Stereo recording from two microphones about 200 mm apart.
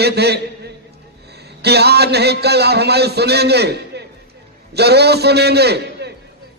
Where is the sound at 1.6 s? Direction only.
55° right (ahead or behind).